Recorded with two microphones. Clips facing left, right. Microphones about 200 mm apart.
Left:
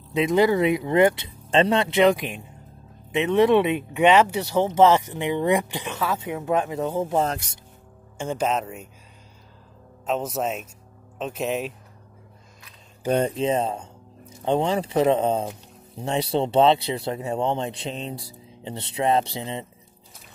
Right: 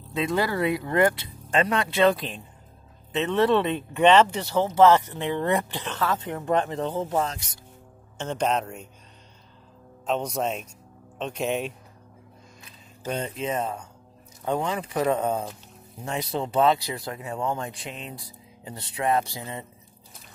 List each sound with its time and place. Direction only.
0.1 s speech: 20° left (ahead or behind)
8.2 s speech: 10° left (ahead or behind)
10.0 s speech: 5° left (ahead or behind)
13.4 s speech: 30° left (ahead or behind)